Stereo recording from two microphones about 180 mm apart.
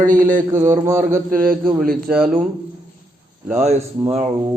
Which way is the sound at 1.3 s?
50° right (ahead or behind).